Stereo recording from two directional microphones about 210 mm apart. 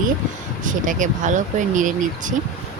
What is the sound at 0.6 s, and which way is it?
Speech, 40° right (ahead or behind).